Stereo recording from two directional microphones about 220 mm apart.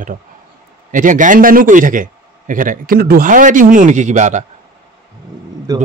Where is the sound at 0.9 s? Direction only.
35° right (ahead or behind).